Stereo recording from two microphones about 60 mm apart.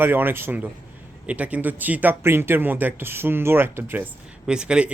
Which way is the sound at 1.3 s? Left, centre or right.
Right.